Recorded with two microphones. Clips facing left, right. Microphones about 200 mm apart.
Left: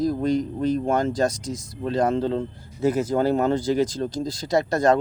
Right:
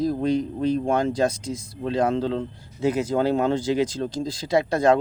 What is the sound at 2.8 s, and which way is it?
Speech, 45° left (ahead or behind).